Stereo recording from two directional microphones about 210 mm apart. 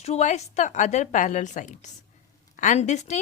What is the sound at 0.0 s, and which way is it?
A woman's voice, 35° left (ahead or behind).